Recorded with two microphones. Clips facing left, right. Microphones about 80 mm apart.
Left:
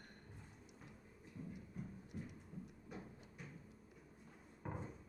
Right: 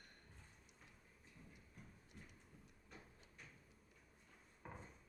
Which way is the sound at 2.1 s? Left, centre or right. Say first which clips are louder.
Left 12 dB; centre.